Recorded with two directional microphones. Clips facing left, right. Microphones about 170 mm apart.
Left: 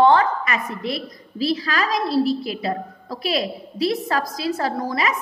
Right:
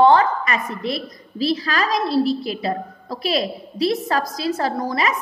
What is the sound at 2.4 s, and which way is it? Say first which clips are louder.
A woman's voice: right 1 dB; 35° right (ahead or behind).